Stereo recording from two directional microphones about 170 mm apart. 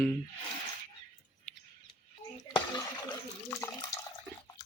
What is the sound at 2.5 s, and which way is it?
Water, 25° left (ahead or behind).